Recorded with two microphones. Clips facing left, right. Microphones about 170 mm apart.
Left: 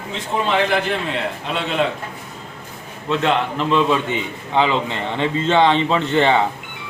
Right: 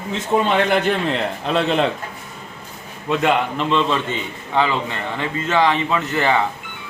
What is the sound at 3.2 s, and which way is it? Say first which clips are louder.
Speech: right 1 dB; 5° right (ahead or behind).